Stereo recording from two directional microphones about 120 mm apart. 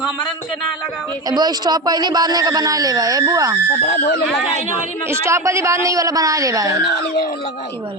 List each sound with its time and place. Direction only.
1.3 s a man's voice: 35° right (ahead or behind)
5.0 s a man's voice: 25° right (ahead or behind)